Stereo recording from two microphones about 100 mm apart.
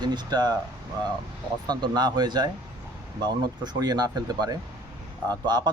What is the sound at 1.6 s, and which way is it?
Speech, 45° right (ahead or behind).